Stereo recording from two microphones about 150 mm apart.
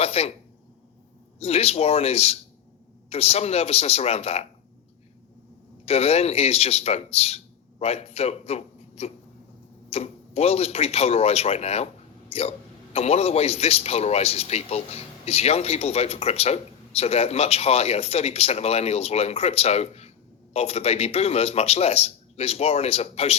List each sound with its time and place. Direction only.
0.0 s a sound: 45° left (ahead or behind)
1.4 s a man's voice: 40° left (ahead or behind)
5.8 s a man's voice: 40° left (ahead or behind)